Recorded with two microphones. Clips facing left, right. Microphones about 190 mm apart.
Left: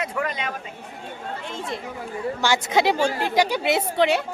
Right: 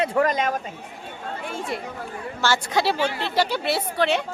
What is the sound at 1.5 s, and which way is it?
Speech, 10° right (ahead or behind).